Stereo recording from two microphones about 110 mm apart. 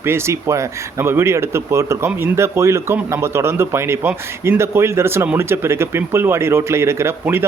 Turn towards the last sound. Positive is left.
turn(degrees=-20)  # may be behind; listen again after turning